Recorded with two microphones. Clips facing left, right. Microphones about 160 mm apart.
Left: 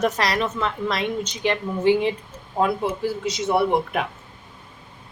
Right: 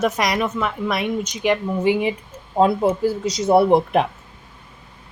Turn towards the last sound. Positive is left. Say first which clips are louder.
# right 6 dB
turn(degrees=-35)  # may be behind; listen again after turning